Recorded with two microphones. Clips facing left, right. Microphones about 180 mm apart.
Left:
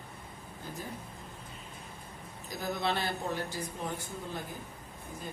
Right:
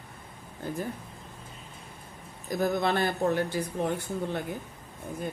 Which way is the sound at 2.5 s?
50° right (ahead or behind).